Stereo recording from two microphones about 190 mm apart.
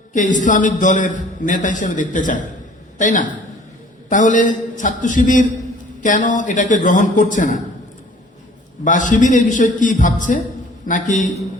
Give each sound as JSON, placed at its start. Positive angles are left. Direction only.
{"t": 0.1, "sound": "a man's voice", "side_deg": 40}
{"t": 8.8, "sound": "a man's voice", "side_deg": 40}